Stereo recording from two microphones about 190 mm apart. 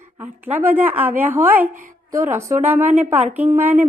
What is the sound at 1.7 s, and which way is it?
Speech, 45° right (ahead or behind).